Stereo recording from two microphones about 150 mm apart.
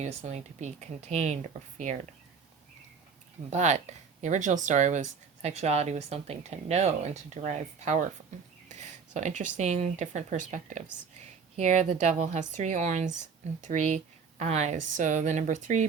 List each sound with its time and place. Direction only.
0.0 s speech: 50° right (ahead or behind)
3.5 s speech: 50° right (ahead or behind)